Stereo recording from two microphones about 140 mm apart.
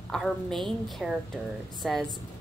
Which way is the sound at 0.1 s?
Centre (ahead or behind).